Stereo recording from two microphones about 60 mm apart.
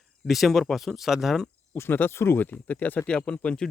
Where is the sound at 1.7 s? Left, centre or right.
Left.